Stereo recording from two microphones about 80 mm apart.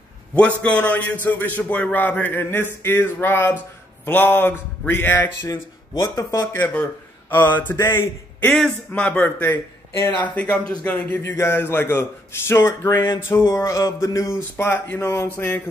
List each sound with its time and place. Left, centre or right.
0.6 s a man's voice: centre
5.5 s speech: left
6.5 s a man's voice: left
8.4 s a man's voice: centre
10.3 s a man's voice: centre
11.3 s speech: left
13.5 s speech: left
14.6 s a man's voice: left